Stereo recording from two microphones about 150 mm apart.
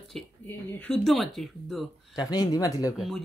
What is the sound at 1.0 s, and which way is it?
Speech, centre (ahead or behind).